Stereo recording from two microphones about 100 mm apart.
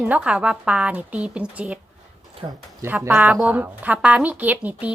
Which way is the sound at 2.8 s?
20° right (ahead or behind).